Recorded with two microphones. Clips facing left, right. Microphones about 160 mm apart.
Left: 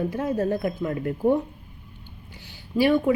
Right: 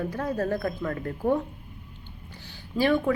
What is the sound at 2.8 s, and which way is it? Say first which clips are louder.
Speech: left 3 dB; 15° left (ahead or behind).